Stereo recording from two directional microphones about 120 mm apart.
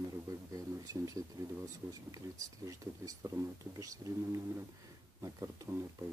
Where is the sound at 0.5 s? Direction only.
30° right (ahead or behind).